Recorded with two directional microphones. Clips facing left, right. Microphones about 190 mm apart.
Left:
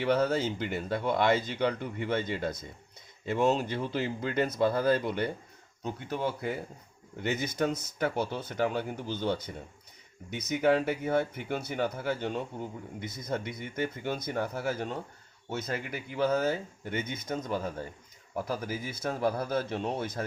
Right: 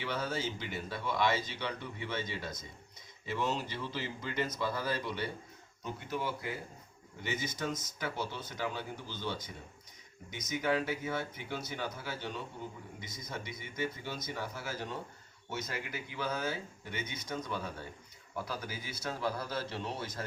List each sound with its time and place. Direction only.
0.0 s speech: 60° left (ahead or behind)